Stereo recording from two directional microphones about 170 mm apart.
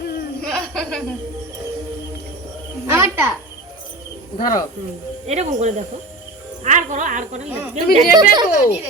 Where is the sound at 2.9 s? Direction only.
15° right (ahead or behind).